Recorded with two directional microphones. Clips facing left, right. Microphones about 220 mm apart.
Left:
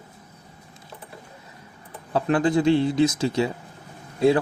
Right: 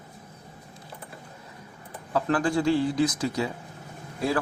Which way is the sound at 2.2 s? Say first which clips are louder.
Left 5 dB; 20° left (ahead or behind).